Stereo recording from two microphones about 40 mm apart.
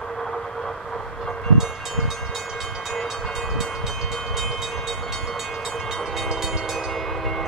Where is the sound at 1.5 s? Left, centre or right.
Centre.